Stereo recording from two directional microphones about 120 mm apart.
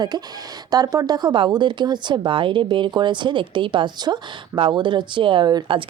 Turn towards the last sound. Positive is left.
turn(degrees=-40)  # may be behind; listen again after turning